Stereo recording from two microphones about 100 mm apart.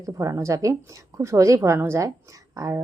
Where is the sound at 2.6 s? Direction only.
40° right (ahead or behind).